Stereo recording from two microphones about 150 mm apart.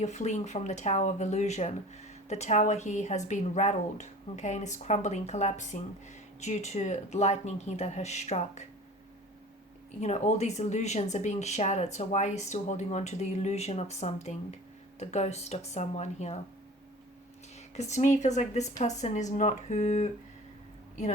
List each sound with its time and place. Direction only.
0.0 s speech: 50° left (ahead or behind)
10.0 s speech: 50° left (ahead or behind)
17.7 s speech: 50° left (ahead or behind)